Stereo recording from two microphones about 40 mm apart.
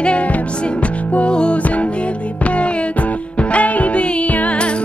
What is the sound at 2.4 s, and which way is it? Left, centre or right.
Music, left.